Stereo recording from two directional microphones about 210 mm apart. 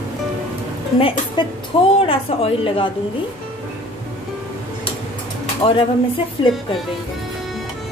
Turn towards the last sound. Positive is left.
turn(degrees=25)  # may be behind; listen again after turning